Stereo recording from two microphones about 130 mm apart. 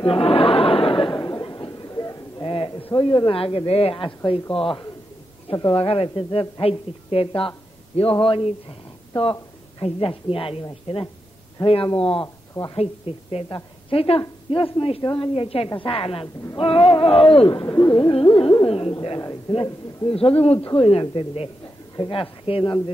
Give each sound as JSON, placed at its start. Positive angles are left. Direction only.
{"t": 0.0, "sound": "chatter", "side_deg": 45}
{"t": 2.4, "sound": "a sound", "side_deg": 45}
{"t": 2.9, "sound": "a woman's voice", "side_deg": 35}